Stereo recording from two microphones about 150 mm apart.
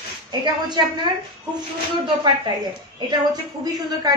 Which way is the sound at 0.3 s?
30° right (ahead or behind).